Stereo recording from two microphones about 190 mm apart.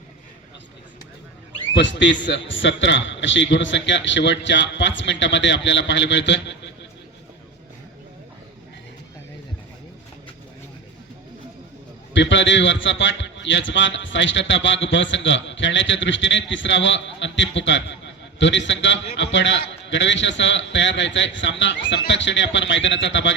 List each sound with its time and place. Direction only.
1.7 s a man's voice: 70° left (ahead or behind)
12.1 s a man's voice: 70° left (ahead or behind)